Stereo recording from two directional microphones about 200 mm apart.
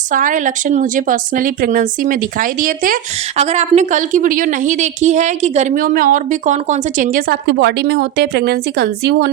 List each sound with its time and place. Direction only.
0.1 s a woman's voice: 40° right (ahead or behind)
7.4 s a woman's voice: 55° right (ahead or behind)